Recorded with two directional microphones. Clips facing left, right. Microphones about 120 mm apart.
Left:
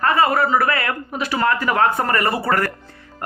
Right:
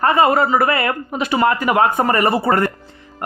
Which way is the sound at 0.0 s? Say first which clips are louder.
Right 3 dB; 20° right (ahead or behind).